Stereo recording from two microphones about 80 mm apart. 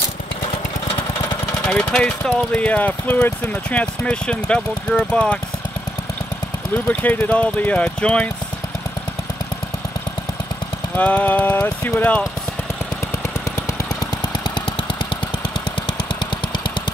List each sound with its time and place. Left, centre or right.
1.7 s speech: centre
6.9 s speech: left
11.0 s speech: centre